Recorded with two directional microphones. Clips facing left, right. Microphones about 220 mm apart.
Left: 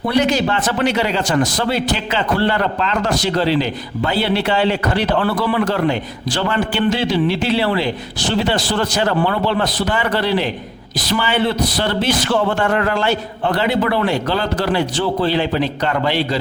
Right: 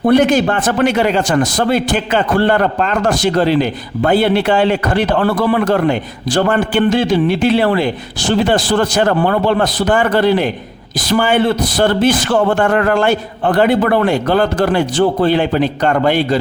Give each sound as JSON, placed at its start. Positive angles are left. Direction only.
{"t": 0.0, "sound": "a man's voice", "side_deg": -50}